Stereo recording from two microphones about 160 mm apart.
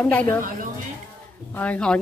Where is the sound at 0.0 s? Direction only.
10° left (ahead or behind).